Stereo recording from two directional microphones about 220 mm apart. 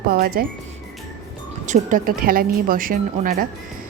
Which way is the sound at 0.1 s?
40° right (ahead or behind).